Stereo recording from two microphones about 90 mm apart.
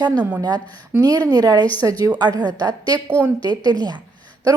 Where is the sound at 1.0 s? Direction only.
45° right (ahead or behind).